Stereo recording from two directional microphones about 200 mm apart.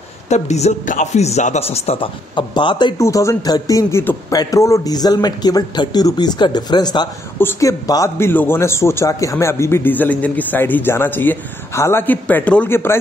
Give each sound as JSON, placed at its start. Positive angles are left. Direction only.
{"t": 0.3, "sound": "a man's voice", "side_deg": 35}